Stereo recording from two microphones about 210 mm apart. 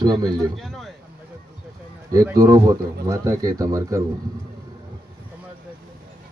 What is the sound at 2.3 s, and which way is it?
Speech, 15° right (ahead or behind).